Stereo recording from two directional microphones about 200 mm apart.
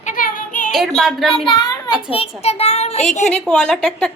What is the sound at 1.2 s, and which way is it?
A child's voice, 25° left (ahead or behind).